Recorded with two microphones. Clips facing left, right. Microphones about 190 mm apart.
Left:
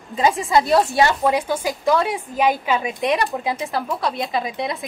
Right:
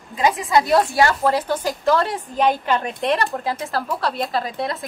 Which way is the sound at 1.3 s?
10° left (ahead or behind).